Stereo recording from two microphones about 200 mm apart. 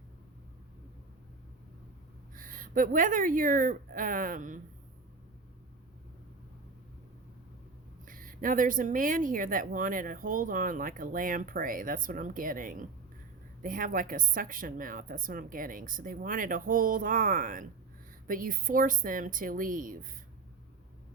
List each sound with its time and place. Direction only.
2.3 s speech: 45° right (ahead or behind)
8.0 s speech: 45° right (ahead or behind)